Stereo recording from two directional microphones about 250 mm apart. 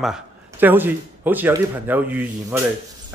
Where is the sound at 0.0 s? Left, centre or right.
Centre.